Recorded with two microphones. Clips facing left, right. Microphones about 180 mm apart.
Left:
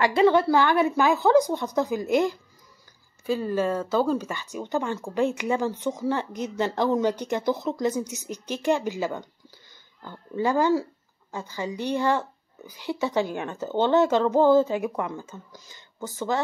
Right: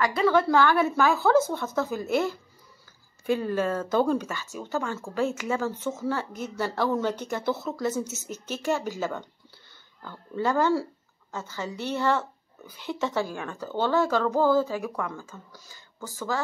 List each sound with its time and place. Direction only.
0.0 s speech: 25° left (ahead or behind)
0.5 s a woman's voice: 15° left (ahead or behind)
3.3 s a woman's voice: 5° left (ahead or behind)
4.6 s a woman's voice: 15° left (ahead or behind)